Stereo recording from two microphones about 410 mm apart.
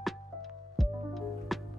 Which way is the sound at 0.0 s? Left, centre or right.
Centre.